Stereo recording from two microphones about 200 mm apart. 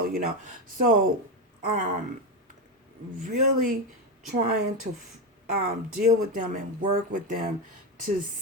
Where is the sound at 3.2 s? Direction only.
45° right (ahead or behind).